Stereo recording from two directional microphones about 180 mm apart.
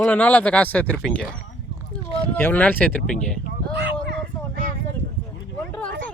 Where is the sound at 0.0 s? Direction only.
10° left (ahead or behind).